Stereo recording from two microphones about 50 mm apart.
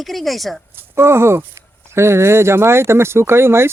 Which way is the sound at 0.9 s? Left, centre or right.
Right.